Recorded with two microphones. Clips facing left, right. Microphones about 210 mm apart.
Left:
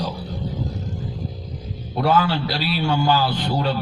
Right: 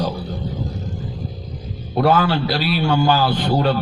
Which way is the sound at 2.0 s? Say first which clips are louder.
Right 3 dB; 55° right (ahead or behind).